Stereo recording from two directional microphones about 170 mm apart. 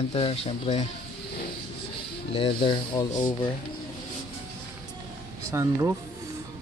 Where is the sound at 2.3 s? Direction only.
30° left (ahead or behind).